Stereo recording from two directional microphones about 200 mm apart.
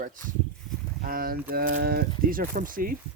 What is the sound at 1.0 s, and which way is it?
Speech, 45° right (ahead or behind).